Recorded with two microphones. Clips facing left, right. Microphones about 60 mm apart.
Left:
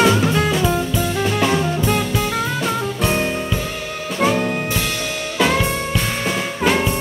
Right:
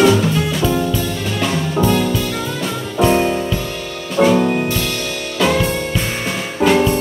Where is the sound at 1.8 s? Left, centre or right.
Centre.